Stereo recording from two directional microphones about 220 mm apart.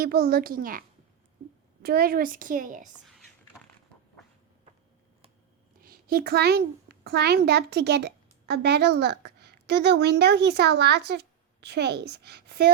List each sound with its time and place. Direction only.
0.0 s a woman's voice: 45° right (ahead or behind)
5.8 s a child's voice: 40° right (ahead or behind)